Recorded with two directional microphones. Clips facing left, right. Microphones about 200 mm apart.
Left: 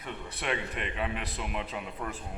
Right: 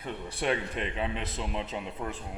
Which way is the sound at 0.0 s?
30° right (ahead or behind).